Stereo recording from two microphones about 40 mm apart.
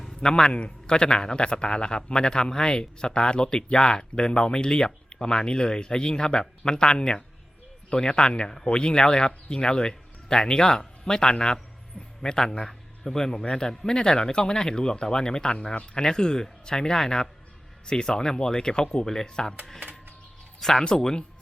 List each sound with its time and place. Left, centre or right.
0.2 s a man's voice: centre
20.6 s speech: centre